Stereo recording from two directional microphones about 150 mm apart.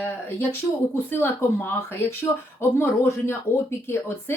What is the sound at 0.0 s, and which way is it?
A woman's voice, 15° left (ahead or behind).